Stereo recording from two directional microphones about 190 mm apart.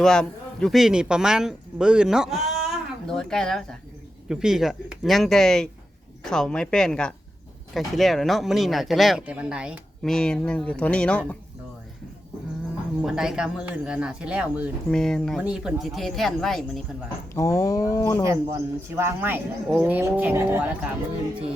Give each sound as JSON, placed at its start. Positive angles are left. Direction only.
{"t": 0.0, "sound": "speech", "side_deg": 5}
{"t": 13.0, "sound": "speech", "side_deg": -5}
{"t": 14.8, "sound": "speech", "side_deg": 5}
{"t": 17.3, "sound": "speech", "side_deg": 15}
{"t": 18.2, "sound": "speech", "side_deg": -15}